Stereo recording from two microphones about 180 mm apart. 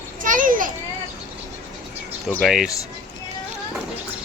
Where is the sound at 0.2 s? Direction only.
45° right (ahead or behind).